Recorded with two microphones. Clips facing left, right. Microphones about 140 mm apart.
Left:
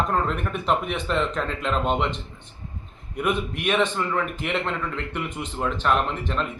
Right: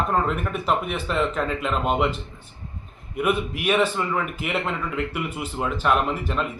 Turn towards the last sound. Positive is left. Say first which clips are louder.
# right 1 dB
turn(degrees=-5)  # may be behind; listen again after turning